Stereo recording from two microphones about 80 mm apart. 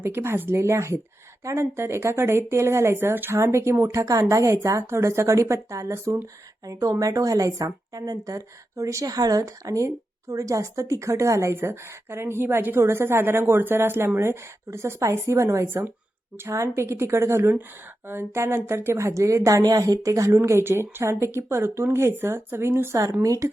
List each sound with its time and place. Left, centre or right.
0.0 s a woman's voice: right
9.0 s a woman's voice: right
23.2 s speech: right